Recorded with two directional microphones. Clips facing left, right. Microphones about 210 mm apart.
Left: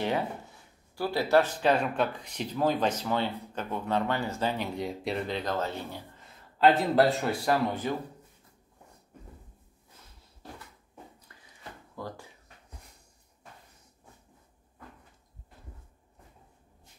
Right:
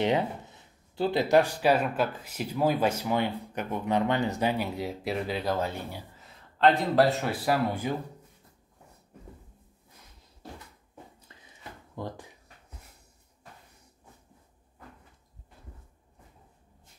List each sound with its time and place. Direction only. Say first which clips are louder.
0.0 s speech: right 4 dB; 20° right (ahead or behind)
6.6 s a man's voice: even; centre (ahead or behind)
11.3 s a sound: right 2 dB; 25° right (ahead or behind)
12.0 s speech: right 3 dB; 20° right (ahead or behind)